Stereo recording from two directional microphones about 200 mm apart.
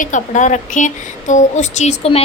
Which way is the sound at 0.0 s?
40° left (ahead or behind).